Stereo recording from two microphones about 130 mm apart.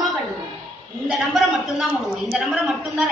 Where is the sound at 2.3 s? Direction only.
Centre (ahead or behind).